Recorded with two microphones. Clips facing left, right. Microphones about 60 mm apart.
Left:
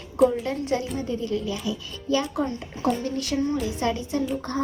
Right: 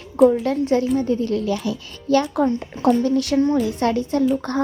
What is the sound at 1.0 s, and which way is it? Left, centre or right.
Speech, right.